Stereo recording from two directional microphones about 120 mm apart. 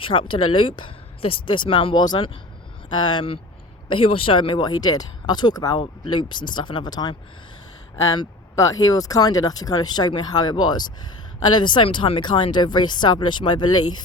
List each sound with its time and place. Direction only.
0.1 s speech: 45° left (ahead or behind)
8.5 s speech: 30° left (ahead or behind)